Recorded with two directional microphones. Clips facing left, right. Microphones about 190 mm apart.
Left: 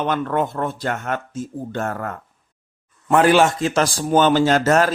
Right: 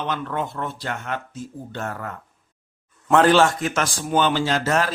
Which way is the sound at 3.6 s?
35° left (ahead or behind).